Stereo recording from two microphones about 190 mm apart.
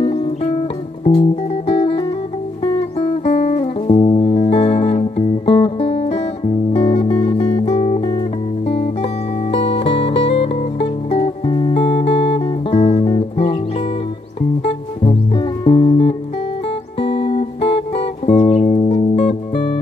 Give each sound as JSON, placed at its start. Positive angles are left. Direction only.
{"t": 0.0, "sound": "music", "side_deg": 30}
{"t": 14.7, "sound": "music", "side_deg": 30}